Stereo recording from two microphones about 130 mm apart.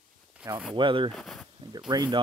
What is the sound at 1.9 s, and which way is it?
Speech, 35° right (ahead or behind).